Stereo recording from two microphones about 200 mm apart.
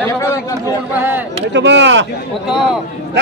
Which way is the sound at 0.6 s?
10° right (ahead or behind).